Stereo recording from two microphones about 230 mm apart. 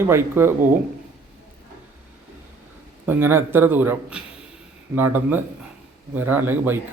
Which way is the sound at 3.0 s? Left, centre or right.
Centre.